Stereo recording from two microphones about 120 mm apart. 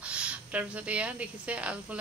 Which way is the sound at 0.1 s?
10° right (ahead or behind).